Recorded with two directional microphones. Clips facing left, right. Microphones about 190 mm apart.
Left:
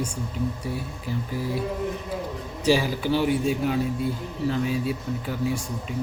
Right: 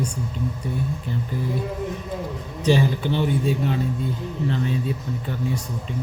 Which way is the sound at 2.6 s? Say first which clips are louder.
Right 2 dB; 5° left (ahead or behind).